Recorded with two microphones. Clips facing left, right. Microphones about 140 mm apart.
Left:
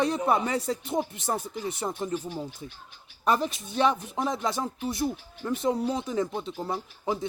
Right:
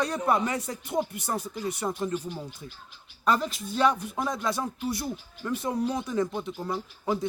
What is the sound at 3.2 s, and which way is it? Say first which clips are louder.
Speech: even; 20° left (ahead or behind).